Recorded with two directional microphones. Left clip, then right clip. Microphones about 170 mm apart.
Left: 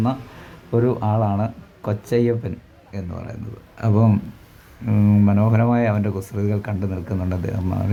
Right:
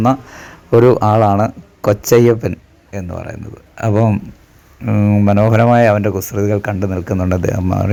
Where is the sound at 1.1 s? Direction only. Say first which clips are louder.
Right 11 dB; 35° right (ahead or behind).